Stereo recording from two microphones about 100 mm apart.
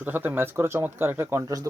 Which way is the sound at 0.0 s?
20° right (ahead or behind).